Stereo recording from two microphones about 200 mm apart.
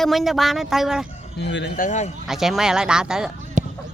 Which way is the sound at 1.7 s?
40° left (ahead or behind).